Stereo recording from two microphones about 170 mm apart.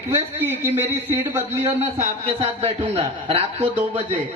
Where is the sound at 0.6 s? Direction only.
10° right (ahead or behind).